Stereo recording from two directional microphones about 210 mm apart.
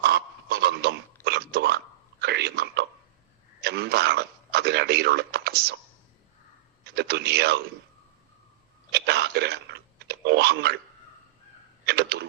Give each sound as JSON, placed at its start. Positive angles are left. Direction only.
{"t": 0.0, "sound": "a sound", "side_deg": -50}
{"t": 2.2, "sound": "whispering", "side_deg": -50}
{"t": 3.6, "sound": "a sound", "side_deg": -50}
{"t": 6.8, "sound": "speech", "side_deg": -50}
{"t": 8.9, "sound": "clicking", "side_deg": -50}
{"t": 11.9, "sound": "camera", "side_deg": -50}